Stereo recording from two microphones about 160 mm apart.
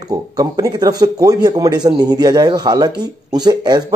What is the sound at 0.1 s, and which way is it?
Speech, 20° right (ahead or behind).